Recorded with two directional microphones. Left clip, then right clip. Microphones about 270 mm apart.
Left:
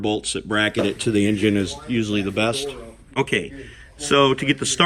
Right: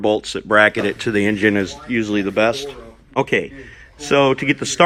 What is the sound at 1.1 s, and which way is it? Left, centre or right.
Speech, centre.